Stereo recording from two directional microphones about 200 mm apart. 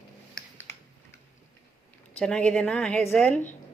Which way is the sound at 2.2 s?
5° left (ahead or behind).